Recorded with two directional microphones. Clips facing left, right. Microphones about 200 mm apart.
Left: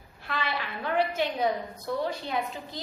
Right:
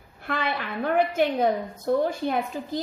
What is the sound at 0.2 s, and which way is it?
A woman's voice, 50° right (ahead or behind).